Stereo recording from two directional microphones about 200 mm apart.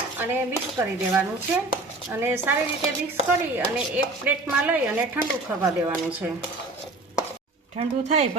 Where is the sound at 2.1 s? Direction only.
10° right (ahead or behind).